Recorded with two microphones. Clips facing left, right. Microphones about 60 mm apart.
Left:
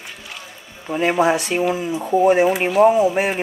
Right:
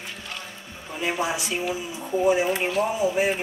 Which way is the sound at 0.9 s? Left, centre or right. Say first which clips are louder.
Left 10 dB; left.